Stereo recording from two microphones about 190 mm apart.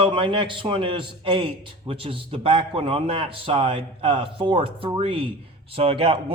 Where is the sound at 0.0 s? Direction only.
25° right (ahead or behind).